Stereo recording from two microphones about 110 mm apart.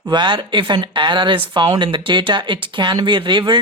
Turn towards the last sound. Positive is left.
turn(degrees=-45)  # may be behind; listen again after turning